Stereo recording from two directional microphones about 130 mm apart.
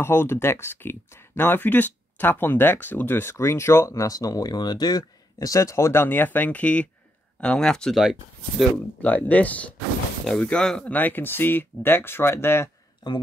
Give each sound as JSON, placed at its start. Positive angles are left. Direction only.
{"t": 0.0, "sound": "speech", "side_deg": 20}
{"t": 9.0, "sound": "speech", "side_deg": 10}